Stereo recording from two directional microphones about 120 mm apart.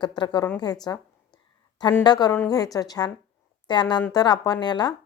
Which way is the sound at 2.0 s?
35° left (ahead or behind).